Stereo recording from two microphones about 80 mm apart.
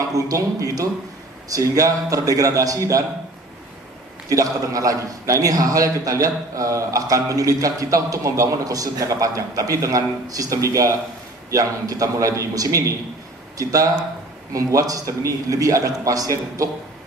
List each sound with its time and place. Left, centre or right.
0.1 s a man's voice: right
4.3 s a man's voice: right